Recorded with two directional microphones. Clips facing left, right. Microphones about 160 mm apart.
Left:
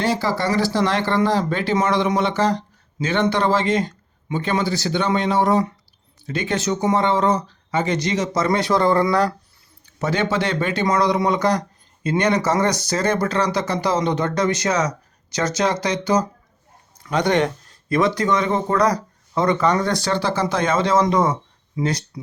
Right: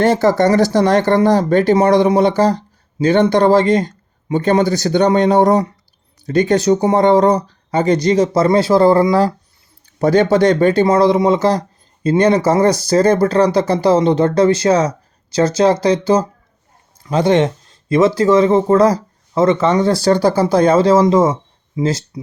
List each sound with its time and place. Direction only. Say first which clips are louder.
0.0 s speech: right 9 dB; 50° right (ahead or behind); by 20.1 s 30° right (ahead or behind)
20.1 s speech: right 8 dB; 40° right (ahead or behind); by 22.2 s 25° right (ahead or behind)